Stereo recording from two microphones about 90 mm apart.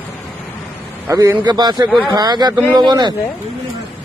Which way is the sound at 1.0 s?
35° right (ahead or behind).